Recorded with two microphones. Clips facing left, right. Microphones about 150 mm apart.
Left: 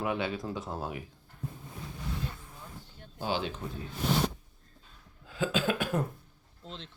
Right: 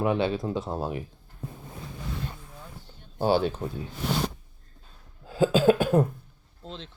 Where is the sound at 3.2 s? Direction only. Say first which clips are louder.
Right 9 dB; 40° right (ahead or behind).